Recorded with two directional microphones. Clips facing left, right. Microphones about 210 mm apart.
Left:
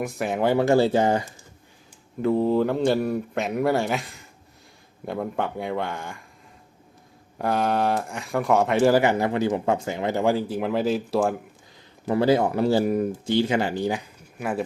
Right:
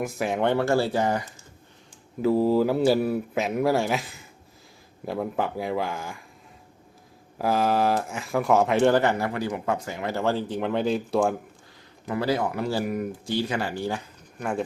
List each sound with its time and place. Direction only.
0.0 s speech: centre (ahead or behind)
0.6 s speech: 20° left (ahead or behind)
2.2 s speech: 5° right (ahead or behind)
7.3 s speech: centre (ahead or behind)
12.0 s speech: 25° left (ahead or behind); by 14.6 s 5° left (ahead or behind)